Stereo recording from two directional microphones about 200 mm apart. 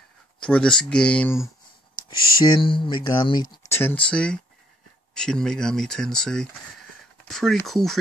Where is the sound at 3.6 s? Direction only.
10° left (ahead or behind).